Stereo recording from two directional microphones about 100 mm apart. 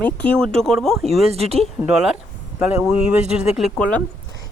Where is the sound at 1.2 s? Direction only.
90° right.